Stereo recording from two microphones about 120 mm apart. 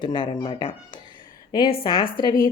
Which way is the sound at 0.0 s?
40° left (ahead or behind).